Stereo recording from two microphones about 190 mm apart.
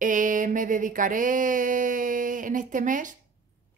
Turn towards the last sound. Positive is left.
turn(degrees=-45)  # may be behind; listen again after turning